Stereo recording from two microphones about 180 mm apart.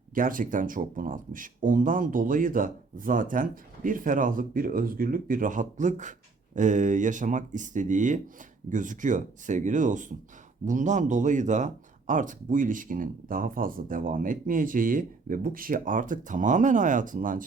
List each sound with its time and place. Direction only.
0.1 s speech: 50° right (ahead or behind)